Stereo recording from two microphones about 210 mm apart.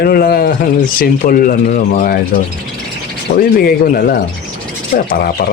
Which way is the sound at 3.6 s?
45° left (ahead or behind).